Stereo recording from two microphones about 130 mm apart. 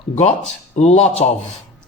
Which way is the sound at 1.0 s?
50° left (ahead or behind).